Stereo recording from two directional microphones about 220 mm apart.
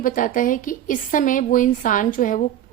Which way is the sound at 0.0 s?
40° left (ahead or behind).